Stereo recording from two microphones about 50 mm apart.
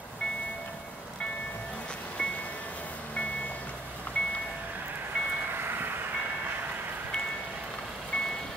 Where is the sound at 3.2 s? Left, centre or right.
Left.